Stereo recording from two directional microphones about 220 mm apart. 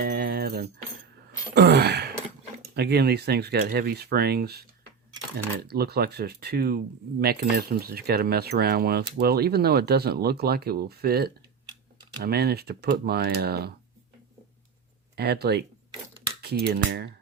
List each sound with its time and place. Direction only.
0.0 s a sound: 40° right (ahead or behind)
2.7 s speech: 45° right (ahead or behind)
15.1 s speech: 45° right (ahead or behind)